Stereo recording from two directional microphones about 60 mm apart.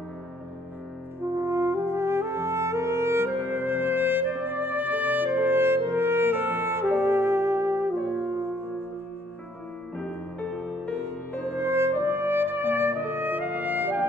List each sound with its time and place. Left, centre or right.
1.3 s music: right
9.9 s music: centre
11.5 s music: right